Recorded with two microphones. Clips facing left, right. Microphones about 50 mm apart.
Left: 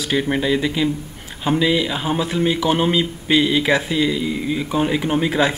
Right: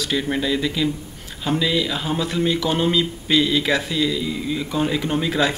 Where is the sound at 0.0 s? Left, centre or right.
Centre.